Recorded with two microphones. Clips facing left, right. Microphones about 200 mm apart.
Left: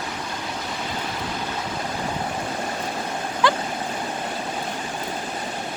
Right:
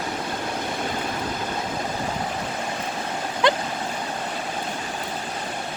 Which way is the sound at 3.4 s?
20° right (ahead or behind).